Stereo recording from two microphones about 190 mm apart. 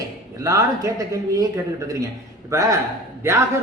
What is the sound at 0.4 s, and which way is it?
A man's voice, 15° right (ahead or behind).